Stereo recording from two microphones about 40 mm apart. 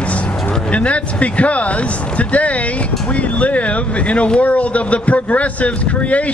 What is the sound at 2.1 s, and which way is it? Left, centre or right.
Vehicle, left.